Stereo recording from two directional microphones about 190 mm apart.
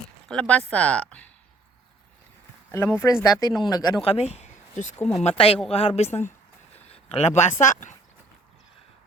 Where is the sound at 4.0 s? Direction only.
35° left (ahead or behind).